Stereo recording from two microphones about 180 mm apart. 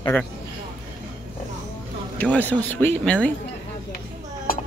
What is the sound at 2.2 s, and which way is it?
Speech, 10° left (ahead or behind).